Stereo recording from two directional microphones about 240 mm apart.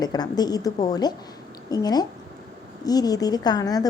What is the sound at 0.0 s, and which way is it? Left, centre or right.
A woman's voice, centre.